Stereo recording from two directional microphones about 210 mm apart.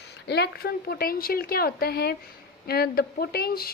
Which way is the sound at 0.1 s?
50° left (ahead or behind).